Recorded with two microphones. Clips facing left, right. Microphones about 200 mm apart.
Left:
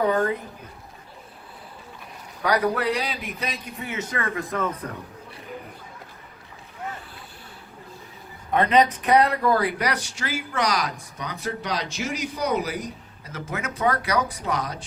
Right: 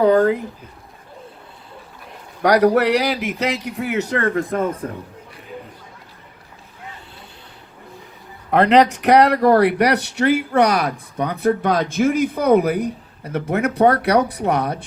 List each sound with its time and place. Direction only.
2.4 s a man's voice: 70° right (ahead or behind)
4.8 s speech: 35° right (ahead or behind)
8.4 s speech: 75° right (ahead or behind); by 14.8 s 60° right (ahead or behind)